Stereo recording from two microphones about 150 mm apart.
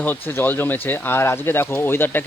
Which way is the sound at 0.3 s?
15° left (ahead or behind).